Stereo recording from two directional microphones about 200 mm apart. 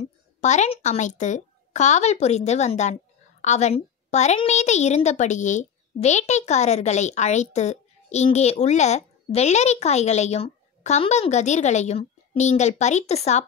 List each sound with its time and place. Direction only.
0.0 s a woman's voice: 35° left (ahead or behind)